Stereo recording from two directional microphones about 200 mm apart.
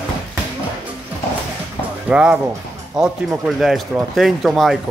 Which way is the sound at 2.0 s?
5° right (ahead or behind).